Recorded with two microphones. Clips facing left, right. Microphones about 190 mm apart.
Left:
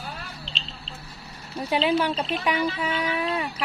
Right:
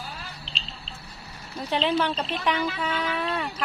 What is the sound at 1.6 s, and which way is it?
Speech, 10° left (ahead or behind).